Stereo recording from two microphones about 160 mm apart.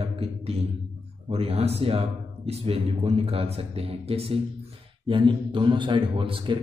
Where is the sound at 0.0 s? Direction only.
40° right (ahead or behind).